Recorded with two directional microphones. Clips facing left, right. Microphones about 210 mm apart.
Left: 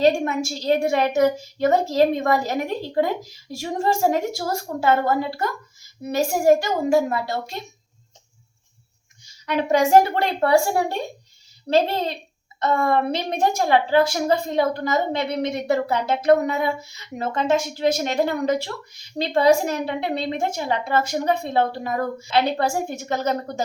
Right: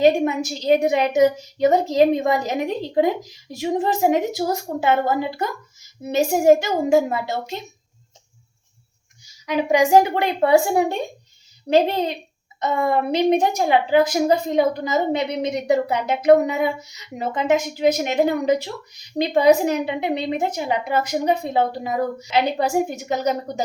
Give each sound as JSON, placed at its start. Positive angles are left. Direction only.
{"t": 0.0, "sound": "a woman's voice", "side_deg": -15}
{"t": 9.2, "sound": "a woman's voice", "side_deg": -10}